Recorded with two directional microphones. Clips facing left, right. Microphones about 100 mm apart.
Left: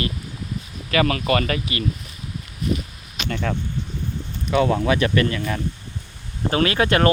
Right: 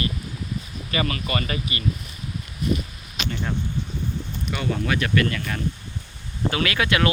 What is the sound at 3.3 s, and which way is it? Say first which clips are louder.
Speech: left 4 dB; 90° left.